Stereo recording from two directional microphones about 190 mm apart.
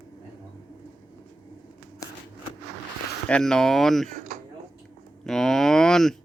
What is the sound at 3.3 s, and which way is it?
Speech, 5° left (ahead or behind).